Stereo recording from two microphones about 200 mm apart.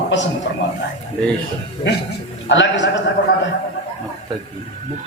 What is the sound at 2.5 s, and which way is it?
Speech, 65° left (ahead or behind).